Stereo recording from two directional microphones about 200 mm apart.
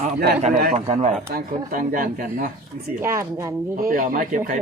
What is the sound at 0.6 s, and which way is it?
Speech, 45° right (ahead or behind).